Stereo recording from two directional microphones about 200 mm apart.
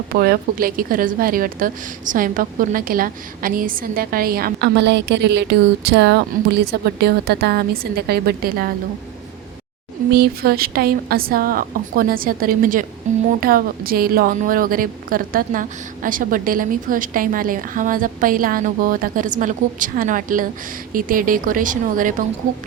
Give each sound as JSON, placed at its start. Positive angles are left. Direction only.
{"t": 0.1, "sound": "a woman's voice", "side_deg": -50}
{"t": 10.1, "sound": "a woman's voice", "side_deg": -50}
{"t": 13.4, "sound": "a woman's voice", "side_deg": -45}